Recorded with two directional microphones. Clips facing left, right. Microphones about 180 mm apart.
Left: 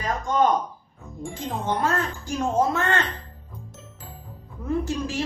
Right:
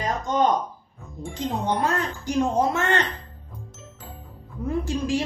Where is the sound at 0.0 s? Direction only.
25° right (ahead or behind).